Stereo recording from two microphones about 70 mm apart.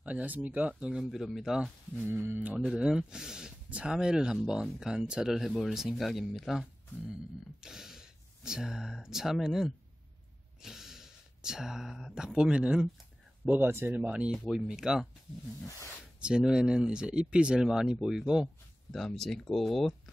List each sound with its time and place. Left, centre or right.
0.0 s speech: right; by 2.0 s centre
2.0 s speech: right
2.4 s speech: centre
13.5 s speech: right
14.5 s speech: centre
15.6 s speech: left
16.2 s speech: centre
18.9 s speech: centre